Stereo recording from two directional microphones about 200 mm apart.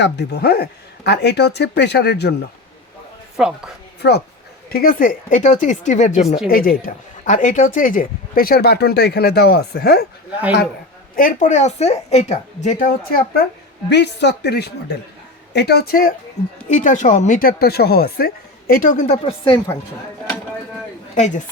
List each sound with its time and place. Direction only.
0.0 s speech: 55° left (ahead or behind)
3.3 s a woman's voice: 5° right (ahead or behind)
4.0 s speech: 55° left (ahead or behind)
11.2 s speech: 40° left (ahead or behind)
13.9 s speech: 55° left (ahead or behind)
18.7 s speech: 40° left (ahead or behind)